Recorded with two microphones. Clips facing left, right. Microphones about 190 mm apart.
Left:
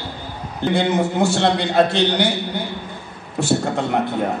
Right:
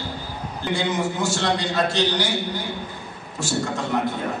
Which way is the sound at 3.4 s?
60° left (ahead or behind).